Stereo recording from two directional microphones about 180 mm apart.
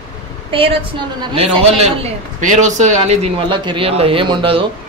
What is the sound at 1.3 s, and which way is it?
A man's voice, 35° right (ahead or behind).